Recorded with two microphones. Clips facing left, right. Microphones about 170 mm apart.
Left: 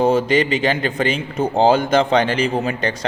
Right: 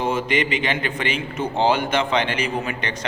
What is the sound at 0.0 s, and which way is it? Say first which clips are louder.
A man's voice: left 6 dB; 35° left (ahead or behind).